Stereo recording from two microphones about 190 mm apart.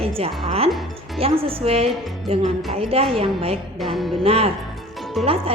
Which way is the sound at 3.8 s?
Centre (ahead or behind).